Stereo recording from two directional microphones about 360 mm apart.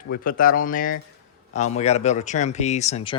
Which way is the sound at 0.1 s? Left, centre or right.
Left.